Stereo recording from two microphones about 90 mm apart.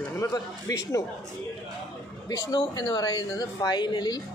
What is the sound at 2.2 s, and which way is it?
Speech, 50° left (ahead or behind).